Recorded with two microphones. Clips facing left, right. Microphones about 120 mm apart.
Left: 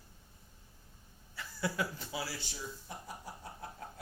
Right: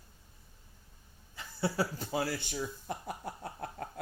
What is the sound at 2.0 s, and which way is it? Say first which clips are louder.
Chuckle: right 7 dB; 50° right (ahead or behind).